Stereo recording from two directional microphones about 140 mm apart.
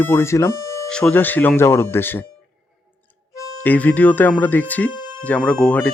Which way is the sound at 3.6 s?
10° left (ahead or behind).